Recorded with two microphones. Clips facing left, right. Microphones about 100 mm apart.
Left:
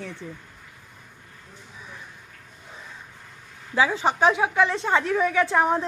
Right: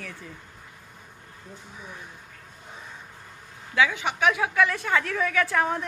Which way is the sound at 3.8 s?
35° left (ahead or behind).